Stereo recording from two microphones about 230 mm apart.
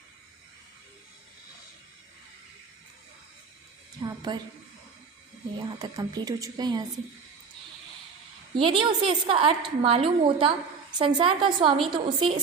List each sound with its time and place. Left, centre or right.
4.0 s a woman's voice: centre
5.5 s a woman's voice: centre
8.5 s a woman's voice: right